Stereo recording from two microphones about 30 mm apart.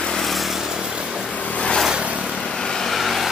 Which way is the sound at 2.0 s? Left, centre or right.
Right.